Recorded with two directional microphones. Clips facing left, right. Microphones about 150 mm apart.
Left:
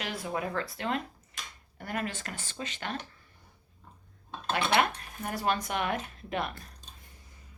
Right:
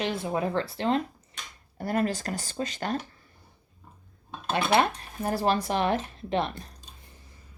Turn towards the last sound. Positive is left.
turn(degrees=-30)  # may be behind; listen again after turning